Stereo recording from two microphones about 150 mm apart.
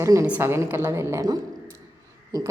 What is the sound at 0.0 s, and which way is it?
A woman's voice, 20° right (ahead or behind).